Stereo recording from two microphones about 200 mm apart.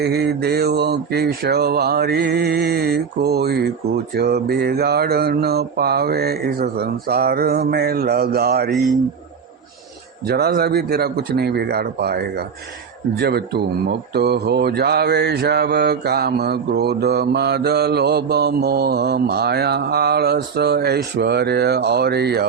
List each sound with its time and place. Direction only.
0.0 s speech: 55° right (ahead or behind)
10.2 s speech: 50° right (ahead or behind)